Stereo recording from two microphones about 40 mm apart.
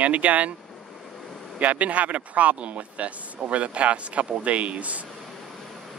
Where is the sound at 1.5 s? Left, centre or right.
Right.